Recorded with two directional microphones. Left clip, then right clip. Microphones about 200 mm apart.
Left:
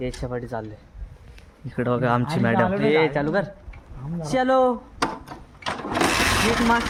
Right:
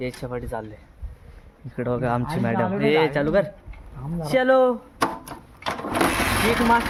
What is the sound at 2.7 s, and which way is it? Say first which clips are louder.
Speech: right 3 dB; 45° right (ahead or behind).